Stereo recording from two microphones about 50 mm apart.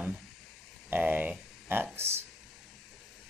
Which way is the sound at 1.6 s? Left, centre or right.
Right.